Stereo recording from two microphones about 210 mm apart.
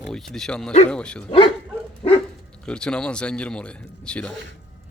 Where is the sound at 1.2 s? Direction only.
25° left (ahead or behind).